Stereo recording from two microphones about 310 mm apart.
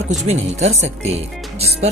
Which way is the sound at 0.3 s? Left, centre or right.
Right.